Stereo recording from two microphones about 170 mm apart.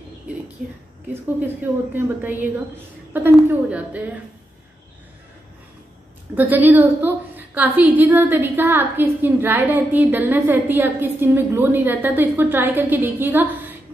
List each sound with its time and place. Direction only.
1.4 s a woman's voice: 10° right (ahead or behind)
6.3 s a woman's voice: 10° right (ahead or behind)